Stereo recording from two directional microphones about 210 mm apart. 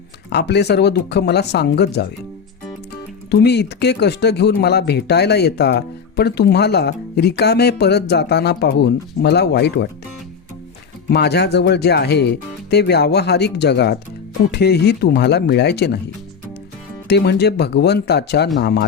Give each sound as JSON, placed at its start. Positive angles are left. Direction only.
{"t": 0.3, "sound": "speech", "side_deg": 55}
{"t": 3.2, "sound": "speech", "side_deg": 55}
{"t": 11.1, "sound": "speech", "side_deg": 50}
{"t": 17.1, "sound": "speech", "side_deg": 55}